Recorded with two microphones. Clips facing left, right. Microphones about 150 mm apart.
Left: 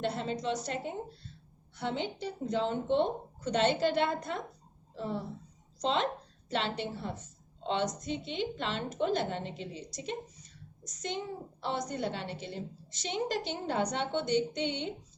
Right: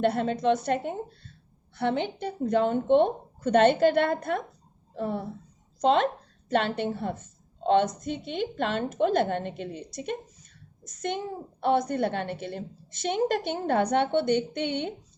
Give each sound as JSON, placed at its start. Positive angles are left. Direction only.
{"t": 0.0, "sound": "a woman's voice", "side_deg": -55}